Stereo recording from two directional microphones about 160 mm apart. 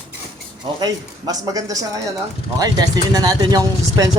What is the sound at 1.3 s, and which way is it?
Speech, 20° right (ahead or behind).